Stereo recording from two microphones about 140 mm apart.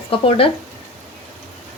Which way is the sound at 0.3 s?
40° left (ahead or behind).